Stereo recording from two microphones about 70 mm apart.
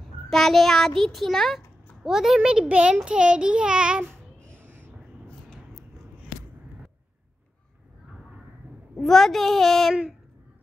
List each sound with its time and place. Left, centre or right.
0.3 s a child's voice: centre
2.0 s child singing: centre
4.4 s a sound: right
8.9 s a child's voice: centre